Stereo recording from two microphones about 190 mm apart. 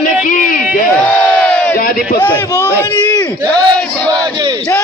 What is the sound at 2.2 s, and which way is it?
A man's voice, 10° left (ahead or behind).